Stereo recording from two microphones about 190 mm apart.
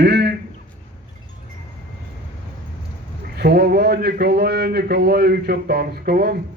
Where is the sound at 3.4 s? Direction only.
55° right (ahead or behind).